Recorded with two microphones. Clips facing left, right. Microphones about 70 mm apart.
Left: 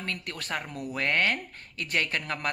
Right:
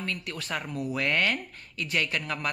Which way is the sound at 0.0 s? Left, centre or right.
Left.